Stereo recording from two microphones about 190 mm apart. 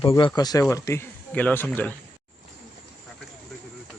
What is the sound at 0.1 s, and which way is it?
Speech, 20° left (ahead or behind).